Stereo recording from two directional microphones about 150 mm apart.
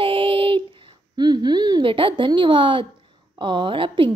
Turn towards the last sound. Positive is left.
turn(degrees=-35)  # may be behind; listen again after turning